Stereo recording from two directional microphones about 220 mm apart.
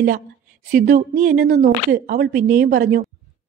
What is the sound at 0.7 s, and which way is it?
A woman's voice, 40° right (ahead or behind).